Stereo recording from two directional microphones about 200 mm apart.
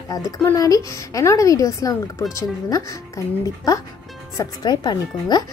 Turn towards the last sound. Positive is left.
turn(degrees=20)  # may be behind; listen again after turning